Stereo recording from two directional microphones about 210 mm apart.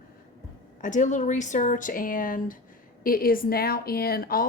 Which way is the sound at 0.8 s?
35° left (ahead or behind).